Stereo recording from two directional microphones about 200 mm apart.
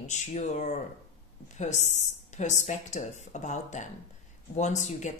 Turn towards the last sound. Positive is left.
turn(degrees=35)  # may be behind; listen again after turning